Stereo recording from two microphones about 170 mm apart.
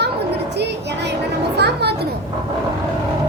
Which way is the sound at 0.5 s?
85° right.